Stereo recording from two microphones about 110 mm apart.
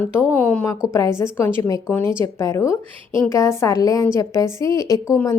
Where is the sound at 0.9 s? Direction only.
25° left (ahead or behind).